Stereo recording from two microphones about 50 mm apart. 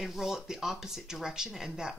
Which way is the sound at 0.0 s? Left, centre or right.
Centre.